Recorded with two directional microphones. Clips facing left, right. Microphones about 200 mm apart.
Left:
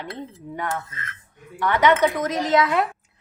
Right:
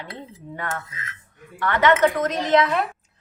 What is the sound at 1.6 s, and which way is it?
Speech, 15° left (ahead or behind).